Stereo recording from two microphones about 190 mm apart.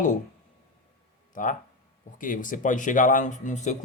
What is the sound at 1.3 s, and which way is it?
Speech, 45° left (ahead or behind).